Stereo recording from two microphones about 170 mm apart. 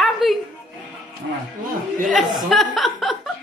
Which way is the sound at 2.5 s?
Centre (ahead or behind).